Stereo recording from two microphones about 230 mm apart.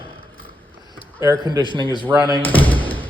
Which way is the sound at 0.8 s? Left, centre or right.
Centre.